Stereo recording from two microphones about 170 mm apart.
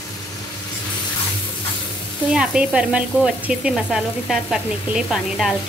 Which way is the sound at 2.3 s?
5° right (ahead or behind).